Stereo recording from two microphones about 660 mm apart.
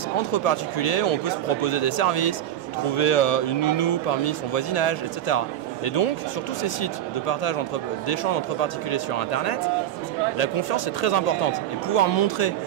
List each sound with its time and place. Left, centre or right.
0.3 s speech: left
6.6 s speech: left